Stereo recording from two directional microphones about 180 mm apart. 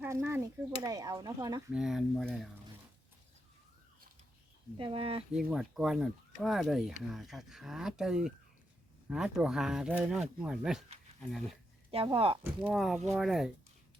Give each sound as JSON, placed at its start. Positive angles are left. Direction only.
{"t": 0.0, "sound": "speech", "side_deg": -10}
{"t": 1.7, "sound": "speech", "side_deg": -5}
{"t": 4.8, "sound": "speech", "side_deg": -30}
{"t": 5.3, "sound": "speech", "side_deg": -5}
{"t": 11.9, "sound": "speech", "side_deg": -30}
{"t": 12.4, "sound": "speech", "side_deg": -5}